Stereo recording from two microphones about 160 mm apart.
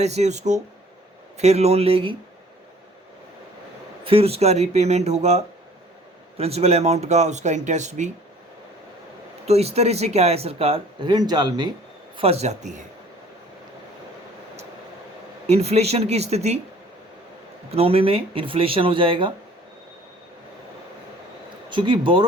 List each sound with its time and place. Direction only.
0.0 s speech: 45° right (ahead or behind)
4.0 s speech: 35° right (ahead or behind)
9.5 s speech: 40° right (ahead or behind)
12.1 s speech: 40° right (ahead or behind)
15.4 s speech: 40° right (ahead or behind)
17.7 s speech: 35° right (ahead or behind)
21.7 s speech: 30° right (ahead or behind)